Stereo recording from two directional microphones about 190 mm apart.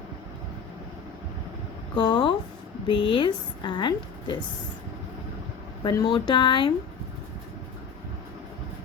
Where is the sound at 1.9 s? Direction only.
25° left (ahead or behind).